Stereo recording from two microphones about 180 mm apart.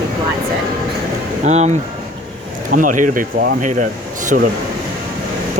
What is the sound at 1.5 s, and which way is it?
Speech, 40° right (ahead or behind).